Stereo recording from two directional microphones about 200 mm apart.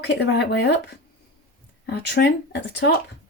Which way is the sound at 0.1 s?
60° left (ahead or behind).